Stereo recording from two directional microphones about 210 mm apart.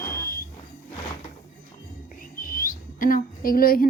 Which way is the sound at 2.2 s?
40° left (ahead or behind).